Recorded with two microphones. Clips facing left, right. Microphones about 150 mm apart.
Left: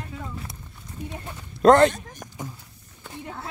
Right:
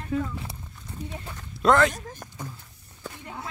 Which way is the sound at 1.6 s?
30° left (ahead or behind).